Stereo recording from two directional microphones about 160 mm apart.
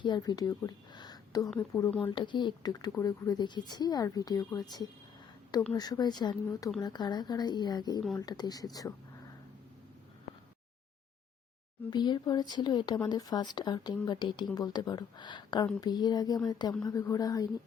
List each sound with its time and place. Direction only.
0.0 s speech: 25° left (ahead or behind)
11.9 s speech: 25° left (ahead or behind)